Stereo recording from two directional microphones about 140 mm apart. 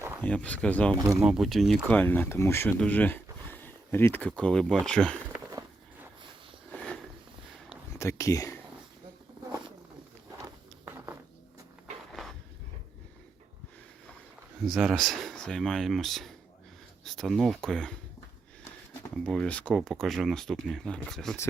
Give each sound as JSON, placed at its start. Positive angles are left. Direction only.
{"t": 0.2, "sound": "speech", "side_deg": 10}
{"t": 0.9, "sound": "speech", "side_deg": -25}
{"t": 1.2, "sound": "speech", "side_deg": 0}
{"t": 2.0, "sound": "speech", "side_deg": 15}
{"t": 6.7, "sound": "sniff", "side_deg": 5}
{"t": 7.9, "sound": "a sound", "side_deg": 20}
{"t": 10.8, "sound": "a sound", "side_deg": -15}
{"t": 14.7, "sound": "speech", "side_deg": 0}
{"t": 18.9, "sound": "speech", "side_deg": 5}